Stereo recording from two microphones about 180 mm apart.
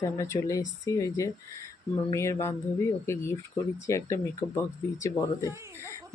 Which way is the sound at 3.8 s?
15° left (ahead or behind).